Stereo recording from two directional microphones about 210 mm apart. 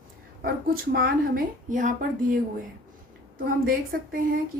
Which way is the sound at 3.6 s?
45° right (ahead or behind).